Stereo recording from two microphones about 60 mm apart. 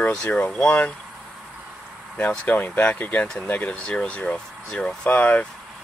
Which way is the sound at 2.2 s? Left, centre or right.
Left.